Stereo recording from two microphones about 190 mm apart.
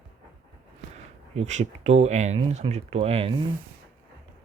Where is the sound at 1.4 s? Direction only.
35° right (ahead or behind).